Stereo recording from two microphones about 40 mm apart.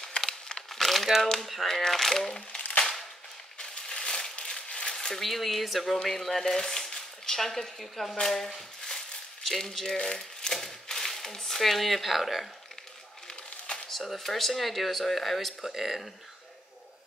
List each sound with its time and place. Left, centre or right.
0.3 s crumpling: centre
0.7 s crumpling: centre
1.2 s speech: centre
2.8 s a sound: centre
3.5 s crushing: centre
4.9 s a sound: centre
5.2 s speech: centre
13.8 s speech: centre
15.6 s speech: centre